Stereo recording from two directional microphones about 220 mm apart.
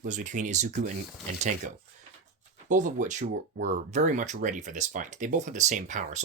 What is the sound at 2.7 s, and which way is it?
Speech, 35° right (ahead or behind).